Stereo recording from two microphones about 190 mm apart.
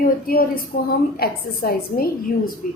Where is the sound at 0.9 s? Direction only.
55° left (ahead or behind).